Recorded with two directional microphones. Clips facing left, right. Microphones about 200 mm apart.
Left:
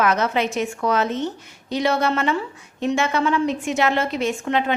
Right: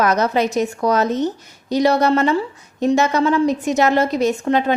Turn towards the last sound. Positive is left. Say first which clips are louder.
# right 4 dB
turn(degrees=-40)  # may be behind; listen again after turning